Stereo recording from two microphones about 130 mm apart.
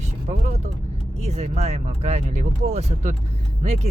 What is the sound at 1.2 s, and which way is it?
Speech, 55° right (ahead or behind).